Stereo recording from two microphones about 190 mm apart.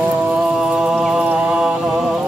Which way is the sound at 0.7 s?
5° right (ahead or behind).